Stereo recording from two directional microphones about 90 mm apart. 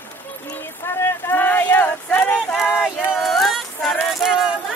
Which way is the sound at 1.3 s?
20° left (ahead or behind).